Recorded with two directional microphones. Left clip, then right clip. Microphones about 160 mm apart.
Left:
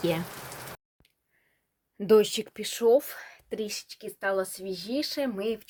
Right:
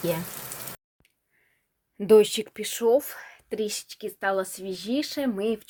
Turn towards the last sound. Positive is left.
turn(degrees=-40)  # may be behind; listen again after turning